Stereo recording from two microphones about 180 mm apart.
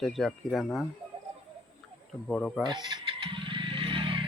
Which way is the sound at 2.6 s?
25° right (ahead or behind).